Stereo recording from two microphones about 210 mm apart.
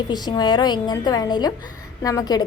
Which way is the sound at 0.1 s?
20° left (ahead or behind).